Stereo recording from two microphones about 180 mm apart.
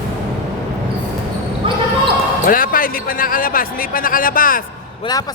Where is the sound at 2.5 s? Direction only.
50° left (ahead or behind).